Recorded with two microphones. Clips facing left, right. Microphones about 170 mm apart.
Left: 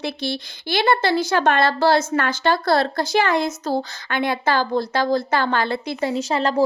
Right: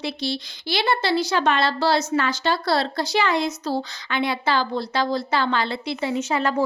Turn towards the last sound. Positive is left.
turn(degrees=35)  # may be behind; listen again after turning